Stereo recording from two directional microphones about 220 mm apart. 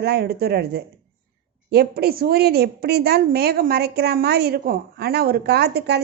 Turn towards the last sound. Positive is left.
turn(degrees=-50)  # may be behind; listen again after turning